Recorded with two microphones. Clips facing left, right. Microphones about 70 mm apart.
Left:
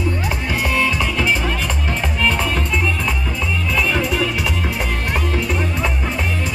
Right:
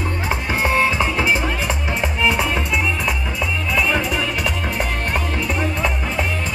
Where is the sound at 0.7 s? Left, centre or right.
Right.